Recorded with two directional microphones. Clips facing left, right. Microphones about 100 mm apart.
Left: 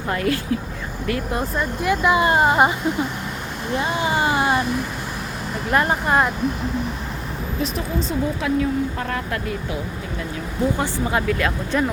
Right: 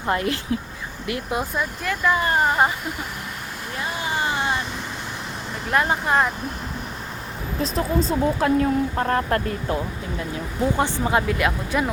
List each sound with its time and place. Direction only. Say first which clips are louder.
0.1 s speech: left 1 dB; 25° right (ahead or behind)
1.8 s speech: left 5 dB; 10° left (ahead or behind)
3.8 s vehicle: left 5 dB; 20° left (ahead or behind)
5.7 s speech: left 1 dB; centre (ahead or behind)
7.6 s speech: right 3 dB; 40° right (ahead or behind)
10.8 s speech: right 1 dB; 20° right (ahead or behind)
11.7 s speech: left 3 dB; 10° right (ahead or behind)